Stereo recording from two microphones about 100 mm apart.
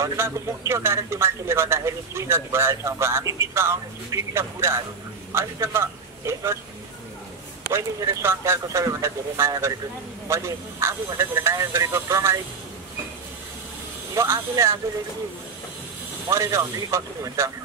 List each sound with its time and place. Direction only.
0.0 s a man's voice: 30° right (ahead or behind)
7.7 s a man's voice: 30° right (ahead or behind)
14.1 s a man's voice: 30° right (ahead or behind)
16.3 s speech: 30° right (ahead or behind)